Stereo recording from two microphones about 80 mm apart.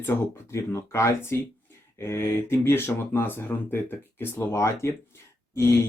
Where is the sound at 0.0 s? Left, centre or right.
Left.